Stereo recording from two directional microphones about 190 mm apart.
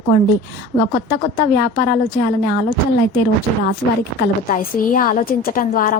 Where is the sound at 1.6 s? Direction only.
50° left (ahead or behind).